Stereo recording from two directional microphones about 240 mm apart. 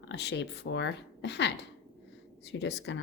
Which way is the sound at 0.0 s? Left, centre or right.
Left.